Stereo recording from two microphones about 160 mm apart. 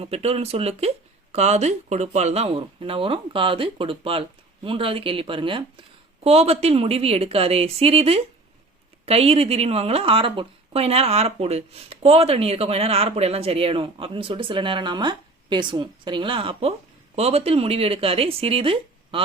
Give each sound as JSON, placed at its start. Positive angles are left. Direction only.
{"t": 0.0, "sound": "a woman's voice", "side_deg": -40}